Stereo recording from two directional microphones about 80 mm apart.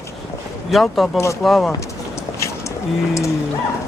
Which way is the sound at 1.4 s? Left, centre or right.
Centre.